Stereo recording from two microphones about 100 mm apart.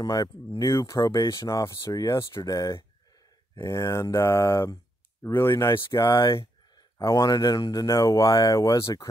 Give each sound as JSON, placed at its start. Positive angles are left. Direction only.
{"t": 0.0, "sound": "speech", "side_deg": 35}
{"t": 5.9, "sound": "speech", "side_deg": 35}